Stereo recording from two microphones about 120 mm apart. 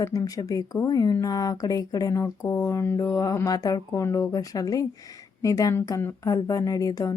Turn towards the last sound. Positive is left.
turn(degrees=30)  # may be behind; listen again after turning